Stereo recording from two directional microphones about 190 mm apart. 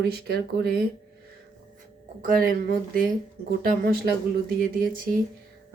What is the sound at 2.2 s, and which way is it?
A woman's voice, 50° right (ahead or behind).